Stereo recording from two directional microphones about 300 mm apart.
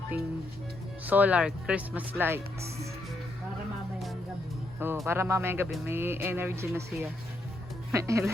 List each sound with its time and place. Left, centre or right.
1.0 s speech: centre
4.8 s speech: centre